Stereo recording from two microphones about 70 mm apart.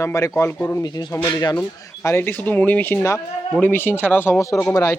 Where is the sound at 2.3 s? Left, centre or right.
Left.